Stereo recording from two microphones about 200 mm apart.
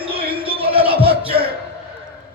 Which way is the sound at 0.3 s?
25° right (ahead or behind).